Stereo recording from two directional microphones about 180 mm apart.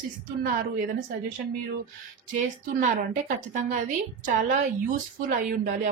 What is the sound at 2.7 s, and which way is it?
A woman's voice, 45° right (ahead or behind).